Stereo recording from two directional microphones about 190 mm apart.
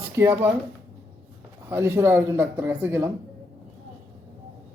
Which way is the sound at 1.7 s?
15° right (ahead or behind).